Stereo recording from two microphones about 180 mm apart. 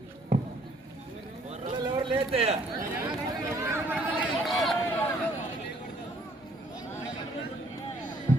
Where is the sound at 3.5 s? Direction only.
15° right (ahead or behind).